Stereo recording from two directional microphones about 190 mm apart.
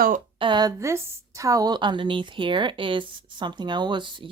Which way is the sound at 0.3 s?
25° right (ahead or behind).